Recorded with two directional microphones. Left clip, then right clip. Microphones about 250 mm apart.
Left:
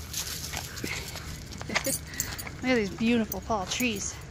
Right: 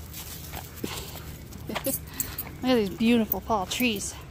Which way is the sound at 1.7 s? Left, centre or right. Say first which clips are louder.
Left 4 dB; centre.